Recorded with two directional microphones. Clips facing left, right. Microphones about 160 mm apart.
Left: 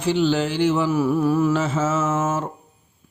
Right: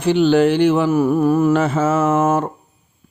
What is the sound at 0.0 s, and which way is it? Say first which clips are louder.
Mantra: right 6 dB; 60° right (ahead or behind).